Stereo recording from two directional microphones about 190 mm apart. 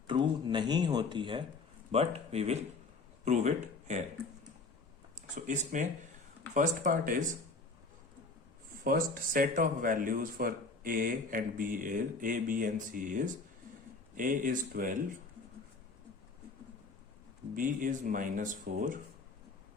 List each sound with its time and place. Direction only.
0.1 s speech: 25° right (ahead or behind)
5.3 s speech: 40° right (ahead or behind)
8.8 s speech: 50° right (ahead or behind)
17.5 s speech: 45° right (ahead or behind)